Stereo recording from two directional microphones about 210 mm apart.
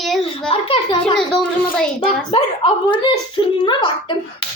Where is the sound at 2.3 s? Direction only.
25° left (ahead or behind).